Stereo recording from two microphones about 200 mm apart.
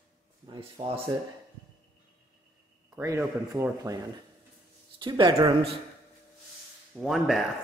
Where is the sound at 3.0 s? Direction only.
15° right (ahead or behind).